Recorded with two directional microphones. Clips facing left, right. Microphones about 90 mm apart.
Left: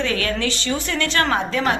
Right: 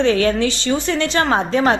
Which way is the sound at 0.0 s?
30° right (ahead or behind).